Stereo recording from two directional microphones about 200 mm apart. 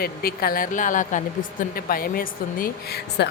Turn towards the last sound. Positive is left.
turn(degrees=55)  # may be behind; listen again after turning